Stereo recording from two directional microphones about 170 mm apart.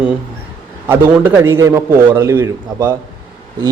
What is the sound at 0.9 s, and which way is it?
A man's voice, 15° right (ahead or behind).